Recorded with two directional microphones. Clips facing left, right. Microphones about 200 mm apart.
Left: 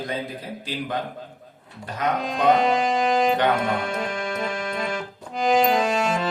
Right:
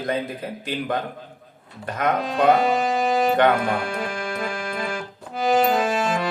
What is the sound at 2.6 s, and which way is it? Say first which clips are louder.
Music: even; 5° right (ahead or behind).